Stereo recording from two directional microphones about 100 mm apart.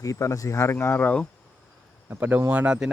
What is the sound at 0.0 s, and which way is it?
Speech, 35° left (ahead or behind).